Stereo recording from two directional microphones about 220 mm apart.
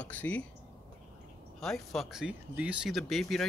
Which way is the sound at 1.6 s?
Centre (ahead or behind).